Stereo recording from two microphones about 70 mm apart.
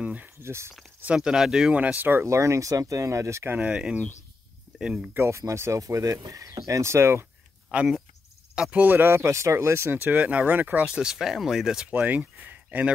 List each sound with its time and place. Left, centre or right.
0.0 s speech: right
0.4 s speech: right
1.0 s speech: centre
2.2 s speech: right
3.5 s speech: centre
5.1 s speech: right
8.5 s speech: centre
11.0 s speech: centre
11.9 s speech: right